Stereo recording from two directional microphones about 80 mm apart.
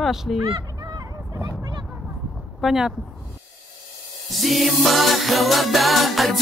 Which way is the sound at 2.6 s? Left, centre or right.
Centre.